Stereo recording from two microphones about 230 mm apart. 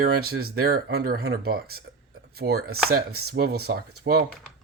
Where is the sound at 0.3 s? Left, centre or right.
Right.